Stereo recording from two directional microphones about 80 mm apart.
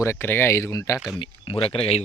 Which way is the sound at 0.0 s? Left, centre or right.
Left.